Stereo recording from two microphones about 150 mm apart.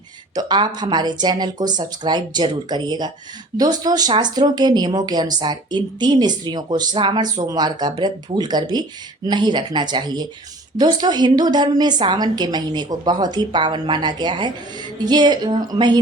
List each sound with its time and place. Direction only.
0.3 s speech: 30° right (ahead or behind)